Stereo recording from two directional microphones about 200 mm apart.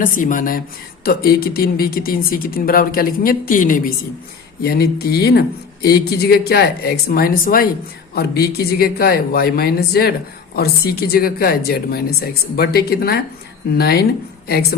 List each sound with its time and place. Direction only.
0.0 s speech: 40° left (ahead or behind)